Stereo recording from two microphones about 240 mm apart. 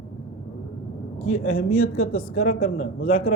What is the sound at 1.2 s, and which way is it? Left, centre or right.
Speech, left.